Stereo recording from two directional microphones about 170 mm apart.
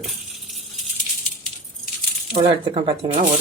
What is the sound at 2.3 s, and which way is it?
Speech, 30° right (ahead or behind).